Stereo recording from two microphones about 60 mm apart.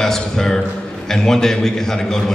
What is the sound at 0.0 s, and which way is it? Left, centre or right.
A man's voice, centre.